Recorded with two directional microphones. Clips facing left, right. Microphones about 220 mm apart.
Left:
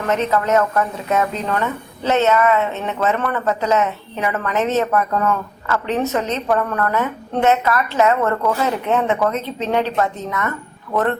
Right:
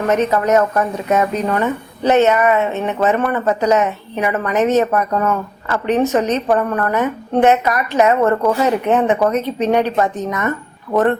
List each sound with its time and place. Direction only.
0.1 s speech: 15° right (ahead or behind)